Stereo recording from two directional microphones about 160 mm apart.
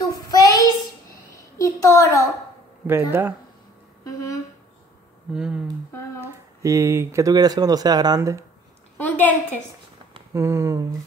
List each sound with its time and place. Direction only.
0.3 s child singing: 20° left (ahead or behind)
1.6 s a woman's voice: 20° left (ahead or behind)
2.9 s speech: 15° right (ahead or behind)
4.0 s a sound: 20° left (ahead or behind)
5.3 s speech: 5° right (ahead or behind)
6.2 s speech: 20° right (ahead or behind)
8.9 s a sound: 10° left (ahead or behind)
10.3 s speech: 20° right (ahead or behind)